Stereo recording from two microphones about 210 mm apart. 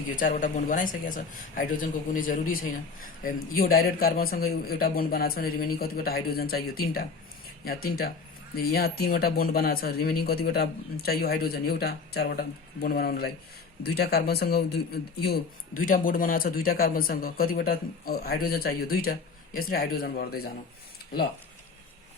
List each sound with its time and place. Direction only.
0.2 s speech: 40° left (ahead or behind)